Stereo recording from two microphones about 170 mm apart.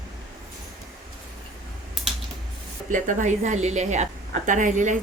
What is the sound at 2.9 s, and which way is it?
A woman's voice, 50° right (ahead or behind).